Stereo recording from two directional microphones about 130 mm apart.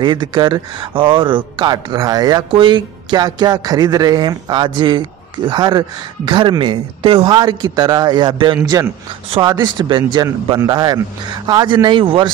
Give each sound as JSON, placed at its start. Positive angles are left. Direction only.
{"t": 0.0, "sound": "a man's voice", "side_deg": -35}